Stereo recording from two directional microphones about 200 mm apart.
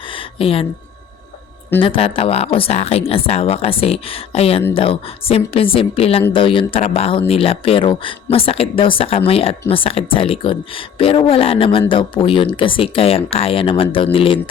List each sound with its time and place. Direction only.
0.3 s speech: 30° left (ahead or behind)
1.8 s speech: 25° left (ahead or behind)